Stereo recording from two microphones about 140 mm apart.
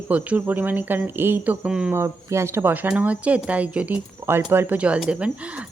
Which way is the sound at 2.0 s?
20° right (ahead or behind).